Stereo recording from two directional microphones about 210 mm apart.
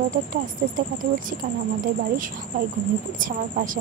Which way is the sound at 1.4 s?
35° right (ahead or behind).